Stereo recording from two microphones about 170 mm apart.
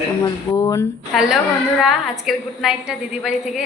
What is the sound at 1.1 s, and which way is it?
A woman's voice, 5° right (ahead or behind).